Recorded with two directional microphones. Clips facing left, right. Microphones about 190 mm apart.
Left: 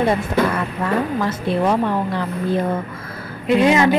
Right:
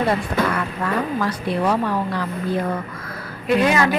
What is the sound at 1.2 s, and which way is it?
A woman's voice, 25° left (ahead or behind).